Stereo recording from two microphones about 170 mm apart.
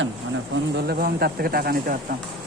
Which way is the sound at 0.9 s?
65° right (ahead or behind).